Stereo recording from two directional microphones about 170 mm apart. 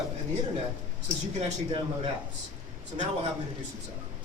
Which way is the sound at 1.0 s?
40° right (ahead or behind).